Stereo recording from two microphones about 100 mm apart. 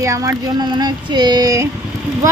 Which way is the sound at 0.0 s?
35° right (ahead or behind).